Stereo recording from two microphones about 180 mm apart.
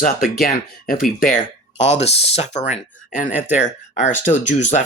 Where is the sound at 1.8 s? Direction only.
35° left (ahead or behind).